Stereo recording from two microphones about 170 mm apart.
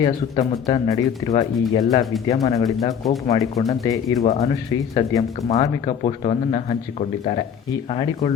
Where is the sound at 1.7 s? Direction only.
20° left (ahead or behind).